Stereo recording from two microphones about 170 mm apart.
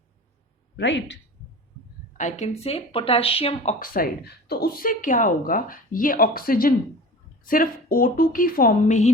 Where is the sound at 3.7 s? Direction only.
55° left (ahead or behind).